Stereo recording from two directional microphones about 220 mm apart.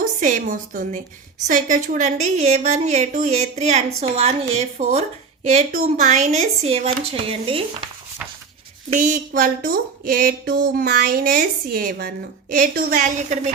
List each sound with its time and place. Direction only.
0.2 s a woman's voice: 35° right (ahead or behind)
8.9 s a woman's voice: 35° right (ahead or behind)